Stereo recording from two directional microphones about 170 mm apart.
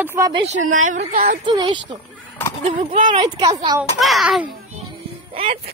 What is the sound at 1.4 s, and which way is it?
Speech, 30° right (ahead or behind).